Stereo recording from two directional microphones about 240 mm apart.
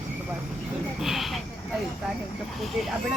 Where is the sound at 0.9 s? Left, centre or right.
Centre.